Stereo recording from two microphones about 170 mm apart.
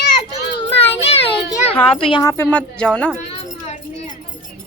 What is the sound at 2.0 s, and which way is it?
Speech, 30° left (ahead or behind).